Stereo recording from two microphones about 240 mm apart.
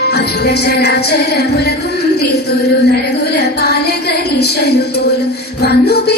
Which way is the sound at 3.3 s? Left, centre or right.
Left.